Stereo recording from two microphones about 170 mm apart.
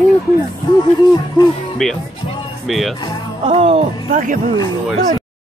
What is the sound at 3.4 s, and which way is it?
Speech, 35° right (ahead or behind).